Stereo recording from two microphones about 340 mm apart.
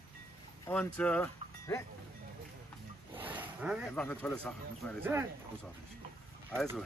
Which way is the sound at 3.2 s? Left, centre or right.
Centre.